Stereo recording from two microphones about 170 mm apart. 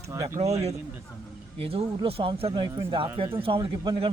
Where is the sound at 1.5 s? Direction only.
35° right (ahead or behind).